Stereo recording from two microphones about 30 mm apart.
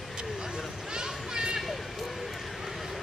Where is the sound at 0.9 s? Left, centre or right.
Right.